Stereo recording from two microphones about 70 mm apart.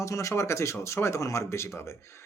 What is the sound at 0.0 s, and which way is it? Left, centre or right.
Speech, left.